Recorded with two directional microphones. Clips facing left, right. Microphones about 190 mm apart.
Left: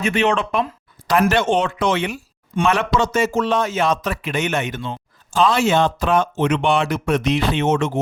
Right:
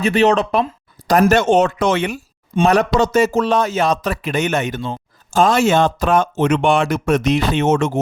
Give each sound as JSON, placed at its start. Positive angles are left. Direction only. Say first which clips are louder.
{"t": 0.0, "sound": "speech", "louder": "right 4 dB", "side_deg": -35}